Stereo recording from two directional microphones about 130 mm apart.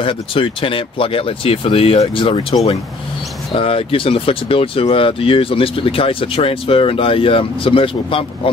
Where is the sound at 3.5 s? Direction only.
45° left (ahead or behind).